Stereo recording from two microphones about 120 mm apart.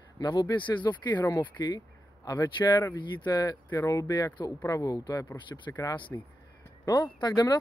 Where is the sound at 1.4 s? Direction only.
30° left (ahead or behind).